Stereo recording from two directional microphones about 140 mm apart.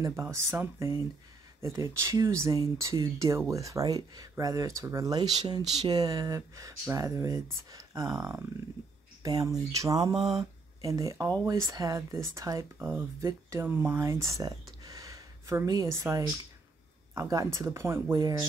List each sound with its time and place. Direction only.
0.0 s speech: 20° right (ahead or behind)